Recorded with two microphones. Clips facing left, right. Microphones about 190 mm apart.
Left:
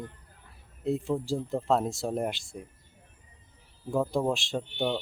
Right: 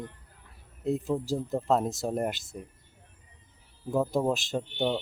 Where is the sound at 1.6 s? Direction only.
Centre (ahead or behind).